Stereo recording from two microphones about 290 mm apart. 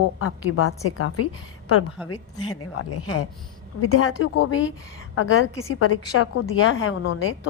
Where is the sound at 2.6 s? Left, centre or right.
Left.